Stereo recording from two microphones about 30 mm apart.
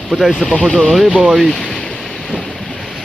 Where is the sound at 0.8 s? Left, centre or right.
Centre.